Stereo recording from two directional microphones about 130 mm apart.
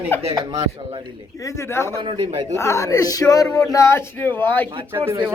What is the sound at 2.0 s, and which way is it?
Speech, 40° right (ahead or behind).